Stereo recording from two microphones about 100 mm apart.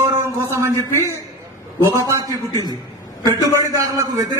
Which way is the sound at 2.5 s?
40° right (ahead or behind).